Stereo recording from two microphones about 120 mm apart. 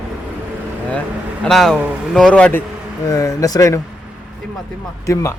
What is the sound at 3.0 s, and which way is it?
Speech, 25° left (ahead or behind).